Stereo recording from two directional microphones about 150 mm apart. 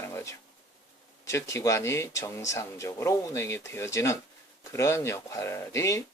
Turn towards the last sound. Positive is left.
turn(degrees=20)  # may be behind; listen again after turning